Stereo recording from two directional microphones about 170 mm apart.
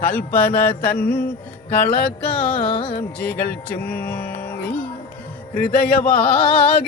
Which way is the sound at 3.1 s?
10° left (ahead or behind).